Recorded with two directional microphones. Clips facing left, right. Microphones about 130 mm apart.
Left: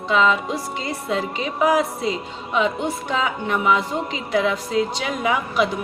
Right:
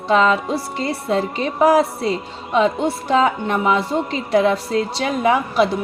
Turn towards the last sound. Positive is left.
turn(degrees=-35)  # may be behind; listen again after turning